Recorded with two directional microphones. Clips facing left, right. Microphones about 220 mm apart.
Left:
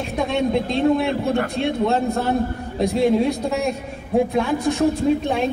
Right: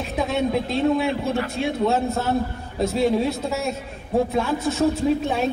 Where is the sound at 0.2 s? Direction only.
5° right (ahead or behind).